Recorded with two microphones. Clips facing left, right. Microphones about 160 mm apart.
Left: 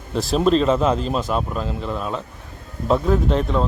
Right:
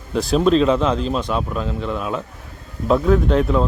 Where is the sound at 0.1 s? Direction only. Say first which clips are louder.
Right 2 dB; centre (ahead or behind).